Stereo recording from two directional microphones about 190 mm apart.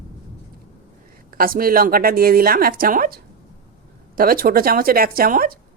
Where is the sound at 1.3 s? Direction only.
50° right (ahead or behind).